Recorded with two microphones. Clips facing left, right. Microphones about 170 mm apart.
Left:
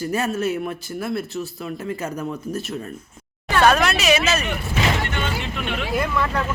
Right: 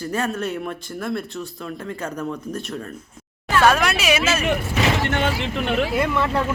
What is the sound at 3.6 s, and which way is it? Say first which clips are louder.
Speech: left 1 dB; 10° right (ahead or behind).